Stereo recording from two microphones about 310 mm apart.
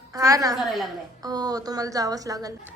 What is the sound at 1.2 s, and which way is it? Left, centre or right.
Speech, centre.